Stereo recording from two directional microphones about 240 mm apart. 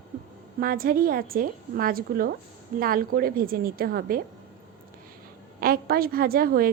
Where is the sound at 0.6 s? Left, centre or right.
Right.